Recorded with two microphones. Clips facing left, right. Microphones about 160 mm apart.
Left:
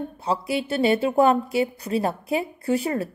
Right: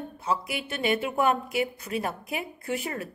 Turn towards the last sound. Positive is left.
turn(degrees=30)  # may be behind; listen again after turning